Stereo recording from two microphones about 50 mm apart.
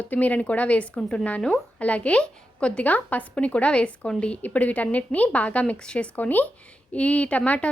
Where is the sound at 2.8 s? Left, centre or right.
Left.